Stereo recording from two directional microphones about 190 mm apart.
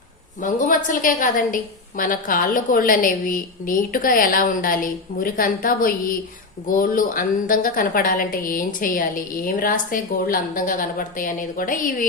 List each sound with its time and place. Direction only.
0.4 s a woman's voice: 45° left (ahead or behind)